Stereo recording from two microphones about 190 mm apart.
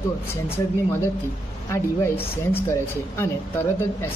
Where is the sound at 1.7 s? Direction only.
10° left (ahead or behind).